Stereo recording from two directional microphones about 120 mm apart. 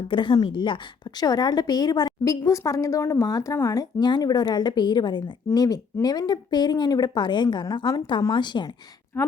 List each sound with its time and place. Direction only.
0.1 s a woman's voice: 40° left (ahead or behind)
9.1 s a woman's voice: 20° left (ahead or behind)